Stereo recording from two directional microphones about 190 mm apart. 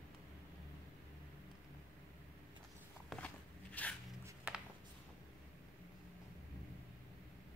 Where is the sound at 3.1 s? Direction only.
10° left (ahead or behind).